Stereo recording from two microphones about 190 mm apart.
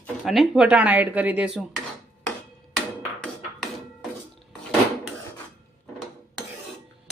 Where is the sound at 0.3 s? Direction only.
Centre (ahead or behind).